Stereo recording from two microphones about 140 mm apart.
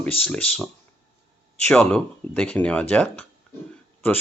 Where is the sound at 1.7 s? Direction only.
10° left (ahead or behind).